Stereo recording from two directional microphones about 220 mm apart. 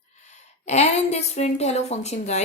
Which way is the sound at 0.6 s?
30° left (ahead or behind).